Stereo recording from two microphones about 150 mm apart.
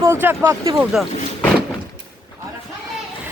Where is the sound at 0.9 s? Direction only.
5° right (ahead or behind).